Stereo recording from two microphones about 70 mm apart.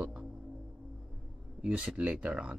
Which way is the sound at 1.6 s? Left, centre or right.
Centre.